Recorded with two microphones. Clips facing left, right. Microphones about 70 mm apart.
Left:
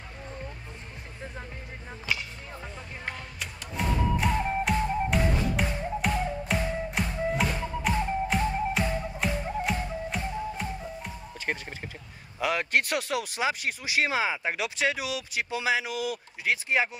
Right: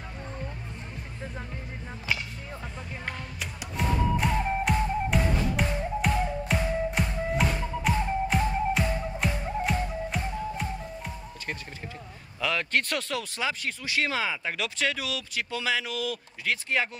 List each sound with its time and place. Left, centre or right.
3.1 s music: centre
12.4 s speech: centre